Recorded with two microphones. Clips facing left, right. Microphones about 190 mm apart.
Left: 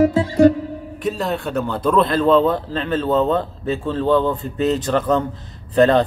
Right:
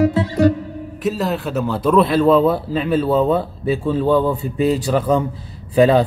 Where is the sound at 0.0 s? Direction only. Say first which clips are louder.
Left 2 dB; 45° left (ahead or behind).